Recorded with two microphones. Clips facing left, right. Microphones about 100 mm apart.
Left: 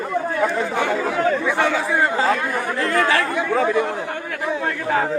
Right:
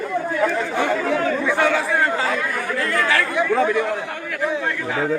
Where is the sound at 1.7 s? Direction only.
Centre (ahead or behind).